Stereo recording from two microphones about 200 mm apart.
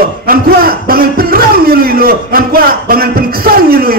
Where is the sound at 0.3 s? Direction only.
50° right (ahead or behind).